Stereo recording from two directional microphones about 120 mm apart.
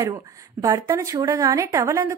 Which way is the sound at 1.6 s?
25° right (ahead or behind).